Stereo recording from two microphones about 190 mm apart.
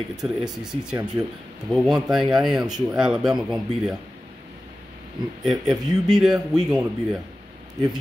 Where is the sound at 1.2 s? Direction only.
15° right (ahead or behind).